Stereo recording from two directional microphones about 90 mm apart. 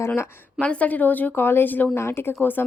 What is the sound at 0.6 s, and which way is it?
Speech, 15° left (ahead or behind).